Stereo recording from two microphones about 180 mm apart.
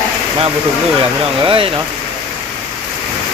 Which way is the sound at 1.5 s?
30° right (ahead or behind).